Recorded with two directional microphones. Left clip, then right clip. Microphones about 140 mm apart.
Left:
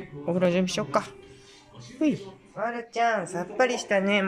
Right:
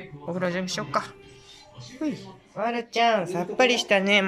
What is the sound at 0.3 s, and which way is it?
Speech, 15° left (ahead or behind).